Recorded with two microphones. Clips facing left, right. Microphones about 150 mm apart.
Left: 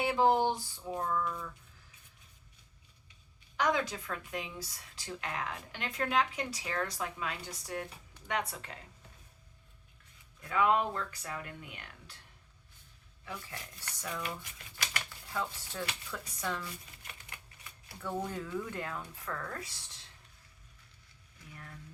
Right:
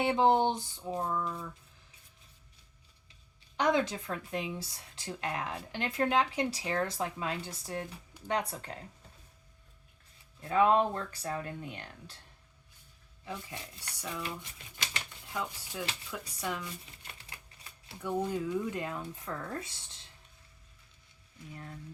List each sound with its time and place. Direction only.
0.0 s speech: 25° right (ahead or behind)
3.6 s speech: 25° right (ahead or behind)
10.4 s speech: 30° right (ahead or behind)
13.8 s speech: 10° right (ahead or behind)
14.2 s speech: 25° right (ahead or behind)
15.3 s speech: 15° right (ahead or behind)
17.2 s typewriter: 30° right (ahead or behind)
18.0 s speech: 15° right (ahead or behind)